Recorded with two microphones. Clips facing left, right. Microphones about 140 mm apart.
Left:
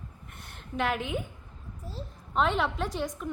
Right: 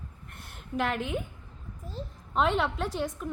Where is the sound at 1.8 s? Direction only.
30° left (ahead or behind).